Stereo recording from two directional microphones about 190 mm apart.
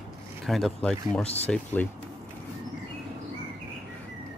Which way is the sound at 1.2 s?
35° left (ahead or behind).